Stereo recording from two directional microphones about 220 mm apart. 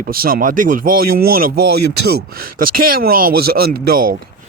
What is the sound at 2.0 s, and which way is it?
A man's voice, 45° right (ahead or behind).